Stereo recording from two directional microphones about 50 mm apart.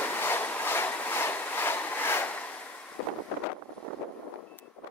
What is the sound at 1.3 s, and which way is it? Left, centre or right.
Vehicle, left.